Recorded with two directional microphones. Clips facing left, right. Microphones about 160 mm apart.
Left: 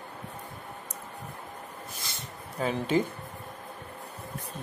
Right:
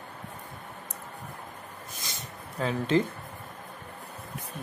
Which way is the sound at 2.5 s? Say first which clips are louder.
Right 1 dB; 10° left (ahead or behind).